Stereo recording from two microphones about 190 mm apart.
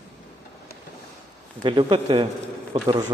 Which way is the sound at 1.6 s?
25° right (ahead or behind).